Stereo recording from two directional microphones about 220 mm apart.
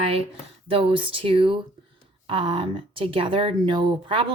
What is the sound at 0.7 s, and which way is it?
A woman's voice, 25° right (ahead or behind).